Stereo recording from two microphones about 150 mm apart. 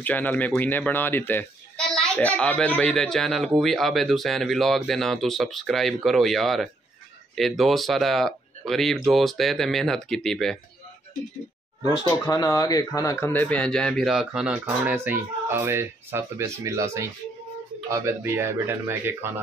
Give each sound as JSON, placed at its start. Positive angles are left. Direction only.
{"t": 0.0, "sound": "a man's voice", "side_deg": 10}
{"t": 11.9, "sound": "a man's voice", "side_deg": 25}